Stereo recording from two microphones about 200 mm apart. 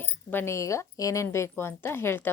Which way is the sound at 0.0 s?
10° left (ahead or behind).